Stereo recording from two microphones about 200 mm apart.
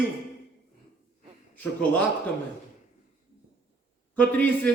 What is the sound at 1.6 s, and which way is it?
Speech, 5° left (ahead or behind).